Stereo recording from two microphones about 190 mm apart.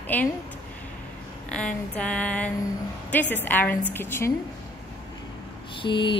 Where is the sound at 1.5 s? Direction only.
5° left (ahead or behind).